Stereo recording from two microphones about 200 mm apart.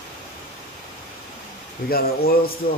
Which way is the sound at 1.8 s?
50° left (ahead or behind).